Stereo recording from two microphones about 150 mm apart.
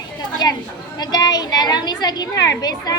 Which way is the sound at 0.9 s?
25° left (ahead or behind).